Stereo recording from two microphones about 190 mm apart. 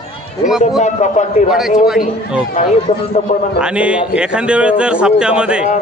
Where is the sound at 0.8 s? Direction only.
40° left (ahead or behind).